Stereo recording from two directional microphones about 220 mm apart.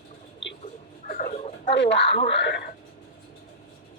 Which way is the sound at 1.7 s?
55° left (ahead or behind).